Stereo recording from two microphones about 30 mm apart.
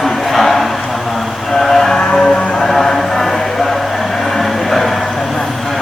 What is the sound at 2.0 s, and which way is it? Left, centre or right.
Music, left.